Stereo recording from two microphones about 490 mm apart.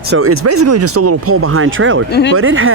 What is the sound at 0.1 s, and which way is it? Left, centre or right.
Speech, right.